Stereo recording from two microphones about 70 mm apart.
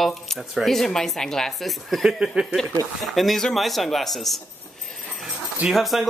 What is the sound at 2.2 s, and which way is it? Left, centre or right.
Speech, centre.